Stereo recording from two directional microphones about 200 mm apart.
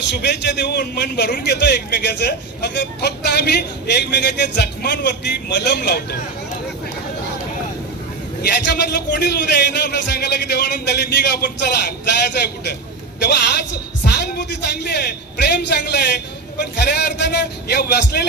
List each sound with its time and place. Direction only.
0.1 s a man's voice: 55° left (ahead or behind)
8.4 s a man's voice: 55° left (ahead or behind)
13.1 s a woman's voice: 55° left (ahead or behind)